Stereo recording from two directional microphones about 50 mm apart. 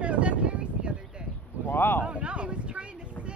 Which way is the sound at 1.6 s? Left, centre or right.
Left.